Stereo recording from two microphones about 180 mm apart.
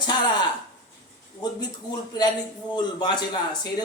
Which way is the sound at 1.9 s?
20° left (ahead or behind).